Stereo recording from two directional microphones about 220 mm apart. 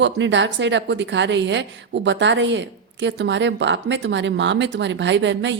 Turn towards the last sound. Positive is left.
turn(degrees=-55)  # may be behind; listen again after turning